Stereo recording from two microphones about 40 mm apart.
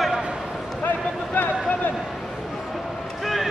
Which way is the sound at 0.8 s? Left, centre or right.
Left.